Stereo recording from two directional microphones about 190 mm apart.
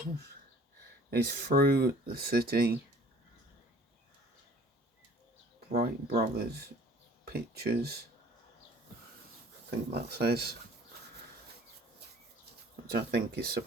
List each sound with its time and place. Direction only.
1.1 s speech: 55° right (ahead or behind)
5.7 s speech: 55° right (ahead or behind)
9.6 s speech: 60° right (ahead or behind)
12.9 s speech: 55° right (ahead or behind)